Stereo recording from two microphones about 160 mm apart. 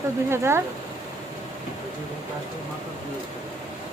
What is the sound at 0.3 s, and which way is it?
Speech, 15° right (ahead or behind).